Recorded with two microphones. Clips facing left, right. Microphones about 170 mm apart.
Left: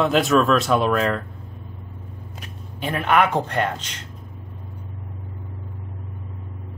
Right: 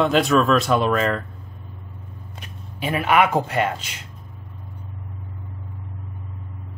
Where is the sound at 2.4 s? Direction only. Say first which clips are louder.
Right 1 dB; centre (ahead or behind).